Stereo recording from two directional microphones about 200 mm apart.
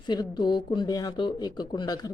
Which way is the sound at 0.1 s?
20° left (ahead or behind).